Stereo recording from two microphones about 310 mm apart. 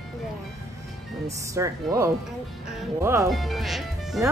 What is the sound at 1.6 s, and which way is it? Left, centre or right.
A woman's voice, centre.